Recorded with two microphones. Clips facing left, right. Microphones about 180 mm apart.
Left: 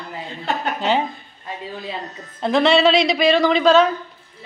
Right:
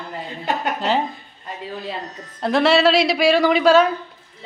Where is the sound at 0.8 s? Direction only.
Centre (ahead or behind).